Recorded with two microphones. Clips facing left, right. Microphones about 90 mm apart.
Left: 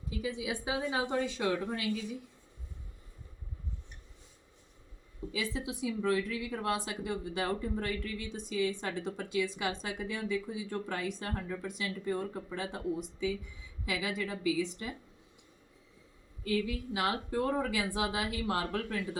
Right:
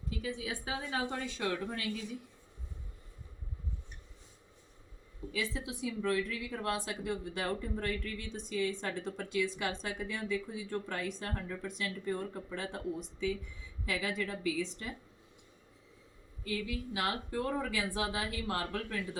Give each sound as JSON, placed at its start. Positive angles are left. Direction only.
{"t": 0.2, "sound": "speech", "side_deg": 15}
{"t": 5.3, "sound": "speech", "side_deg": 15}
{"t": 16.9, "sound": "speech", "side_deg": 20}